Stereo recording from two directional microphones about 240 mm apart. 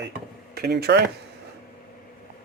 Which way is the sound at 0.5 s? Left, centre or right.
Right.